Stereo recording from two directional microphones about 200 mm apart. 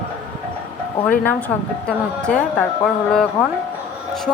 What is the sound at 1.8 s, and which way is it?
A woman's voice, 5° left (ahead or behind).